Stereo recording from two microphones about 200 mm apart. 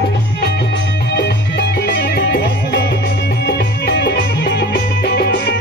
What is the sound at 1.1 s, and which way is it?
Music, 55° left (ahead or behind).